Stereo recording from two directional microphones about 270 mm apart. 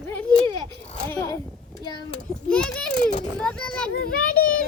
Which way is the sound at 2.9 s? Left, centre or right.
Left.